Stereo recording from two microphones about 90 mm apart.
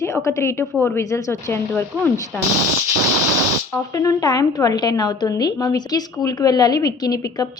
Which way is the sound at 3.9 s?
40° left (ahead or behind).